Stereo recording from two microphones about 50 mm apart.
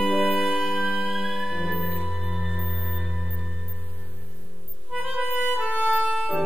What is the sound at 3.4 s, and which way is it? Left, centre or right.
Music, centre.